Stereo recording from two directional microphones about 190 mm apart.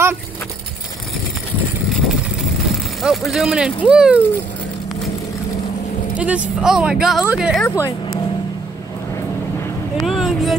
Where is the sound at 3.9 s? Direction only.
5° right (ahead or behind).